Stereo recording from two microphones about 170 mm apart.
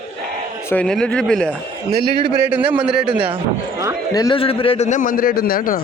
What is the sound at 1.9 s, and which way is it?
Speech, 70° right (ahead or behind).